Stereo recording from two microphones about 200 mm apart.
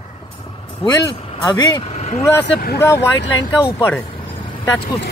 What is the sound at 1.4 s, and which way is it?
Speech, 15° left (ahead or behind).